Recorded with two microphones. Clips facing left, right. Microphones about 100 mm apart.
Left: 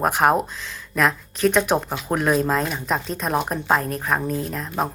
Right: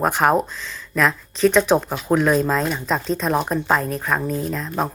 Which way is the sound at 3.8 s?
45° left (ahead or behind).